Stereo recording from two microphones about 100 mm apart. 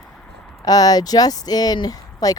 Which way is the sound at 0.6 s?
40° left (ahead or behind).